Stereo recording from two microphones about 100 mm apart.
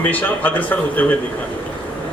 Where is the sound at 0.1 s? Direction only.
15° left (ahead or behind).